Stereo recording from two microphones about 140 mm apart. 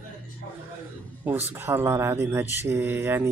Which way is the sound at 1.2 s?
15° right (ahead or behind).